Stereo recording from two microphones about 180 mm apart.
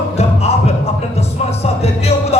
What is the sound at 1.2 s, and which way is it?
A man's voice, 35° left (ahead or behind).